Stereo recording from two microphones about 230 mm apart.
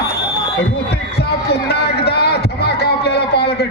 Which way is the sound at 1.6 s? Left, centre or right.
Left.